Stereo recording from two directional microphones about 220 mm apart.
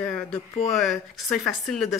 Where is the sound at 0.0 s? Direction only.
5° left (ahead or behind).